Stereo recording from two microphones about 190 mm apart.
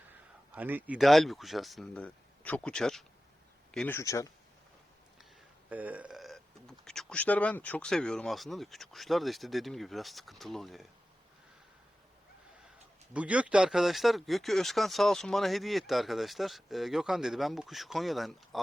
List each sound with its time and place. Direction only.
0.5 s speech: 10° right (ahead or behind); by 4.3 s 15° left (ahead or behind)
5.6 s speech: 10° right (ahead or behind)
13.1 s speech: 5° right (ahead or behind)